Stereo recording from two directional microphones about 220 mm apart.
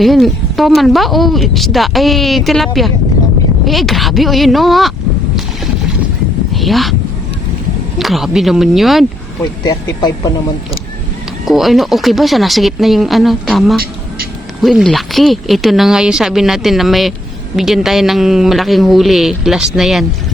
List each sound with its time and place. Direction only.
0.0 s speech: centre (ahead or behind)
3.7 s speech: centre (ahead or behind)
6.5 s a sound: centre (ahead or behind)
7.9 s speech: centre (ahead or behind)
9.4 s speech: 15° left (ahead or behind)
11.4 s speech: centre (ahead or behind)